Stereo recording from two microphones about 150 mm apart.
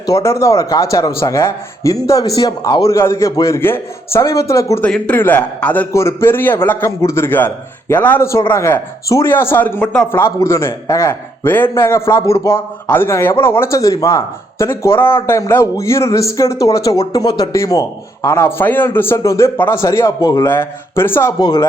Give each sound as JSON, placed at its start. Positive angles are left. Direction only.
{"t": 0.0, "sound": "a man's voice", "side_deg": 20}
{"t": 21.3, "sound": "a man's voice", "side_deg": 30}